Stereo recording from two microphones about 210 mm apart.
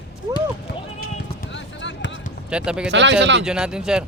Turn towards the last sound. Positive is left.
turn(degrees=-5)  # may be behind; listen again after turning